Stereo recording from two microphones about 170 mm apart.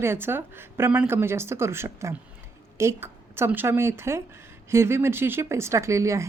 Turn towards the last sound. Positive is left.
turn(degrees=-15)  # may be behind; listen again after turning